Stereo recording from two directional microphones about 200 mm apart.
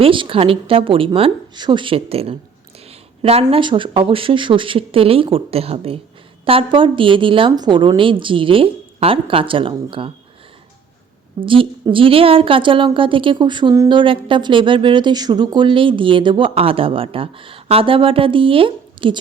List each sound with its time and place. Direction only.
0.0 s a woman's voice: 25° right (ahead or behind)
2.9 s a sound: 30° right (ahead or behind)
3.5 s a woman's voice: 25° right (ahead or behind)
11.4 s a woman's voice: 25° right (ahead or behind)